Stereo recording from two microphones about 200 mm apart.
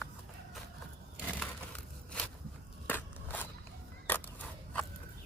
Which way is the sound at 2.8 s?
10° left (ahead or behind).